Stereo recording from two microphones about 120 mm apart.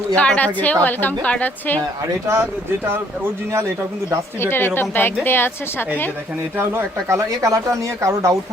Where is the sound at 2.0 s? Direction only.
25° right (ahead or behind).